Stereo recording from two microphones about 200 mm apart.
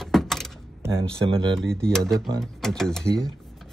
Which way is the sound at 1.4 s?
65° right (ahead or behind).